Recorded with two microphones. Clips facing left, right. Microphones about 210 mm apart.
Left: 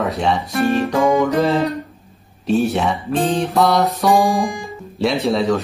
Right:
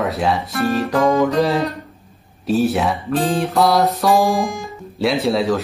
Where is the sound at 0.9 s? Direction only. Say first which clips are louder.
Right 2 dB; 15° left (ahead or behind).